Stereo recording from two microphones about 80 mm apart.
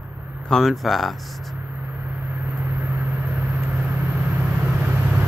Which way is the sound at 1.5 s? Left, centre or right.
Centre.